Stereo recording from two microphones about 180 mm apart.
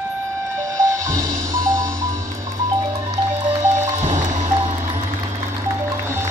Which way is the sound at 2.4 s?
20° right (ahead or behind).